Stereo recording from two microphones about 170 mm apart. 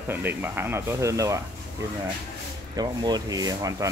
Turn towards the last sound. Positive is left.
turn(degrees=-20)  # may be behind; listen again after turning